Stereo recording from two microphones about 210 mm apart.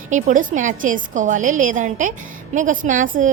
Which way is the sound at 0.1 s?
40° right (ahead or behind).